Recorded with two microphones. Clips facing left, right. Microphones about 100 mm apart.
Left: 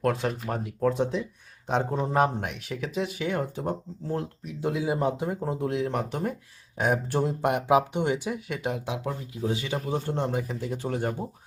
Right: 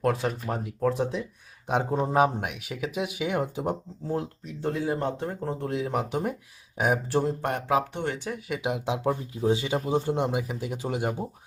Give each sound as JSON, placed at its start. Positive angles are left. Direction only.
{"t": 0.0, "sound": "speech", "side_deg": 0}
{"t": 1.6, "sound": "speech", "side_deg": -15}
{"t": 4.4, "sound": "speech", "side_deg": 5}
{"t": 7.5, "sound": "speech", "side_deg": 15}
{"t": 8.4, "sound": "speech", "side_deg": -5}
{"t": 8.7, "sound": "speech", "side_deg": -25}